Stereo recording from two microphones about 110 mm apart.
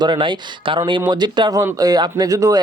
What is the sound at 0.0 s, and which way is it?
Speech, 45° right (ahead or behind).